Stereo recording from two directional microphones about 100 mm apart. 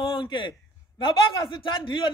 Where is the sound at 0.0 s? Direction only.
55° left (ahead or behind).